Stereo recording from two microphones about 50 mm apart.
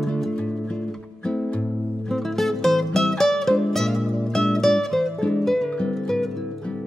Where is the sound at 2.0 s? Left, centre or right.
Centre.